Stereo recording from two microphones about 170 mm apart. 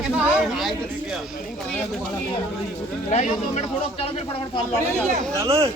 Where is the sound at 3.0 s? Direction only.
40° left (ahead or behind).